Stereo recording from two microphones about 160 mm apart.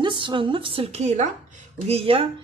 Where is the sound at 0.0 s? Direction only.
30° right (ahead or behind).